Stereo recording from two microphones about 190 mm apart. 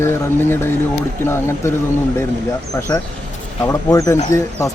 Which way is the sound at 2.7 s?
15° left (ahead or behind).